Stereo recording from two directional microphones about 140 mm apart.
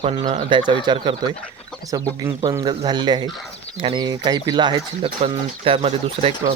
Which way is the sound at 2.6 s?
35° right (ahead or behind).